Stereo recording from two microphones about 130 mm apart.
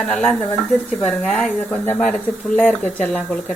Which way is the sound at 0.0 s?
10° left (ahead or behind).